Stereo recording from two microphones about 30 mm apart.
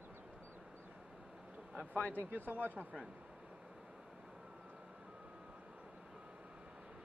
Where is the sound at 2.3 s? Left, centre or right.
Right.